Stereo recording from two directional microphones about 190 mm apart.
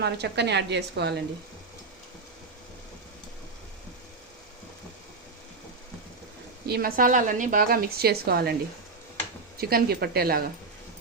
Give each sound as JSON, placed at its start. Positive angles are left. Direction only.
{"t": 0.0, "sound": "a woman's voice", "side_deg": -60}
{"t": 6.7, "sound": "a woman's voice", "side_deg": -55}
{"t": 9.6, "sound": "a woman's voice", "side_deg": -55}